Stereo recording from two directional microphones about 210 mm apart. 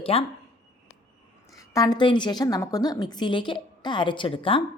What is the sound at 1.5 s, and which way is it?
A woman's voice, 15° left (ahead or behind).